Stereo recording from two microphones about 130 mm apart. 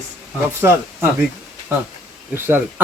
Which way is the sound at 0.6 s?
20° right (ahead or behind).